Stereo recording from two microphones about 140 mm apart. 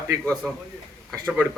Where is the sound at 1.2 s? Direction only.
5° left (ahead or behind).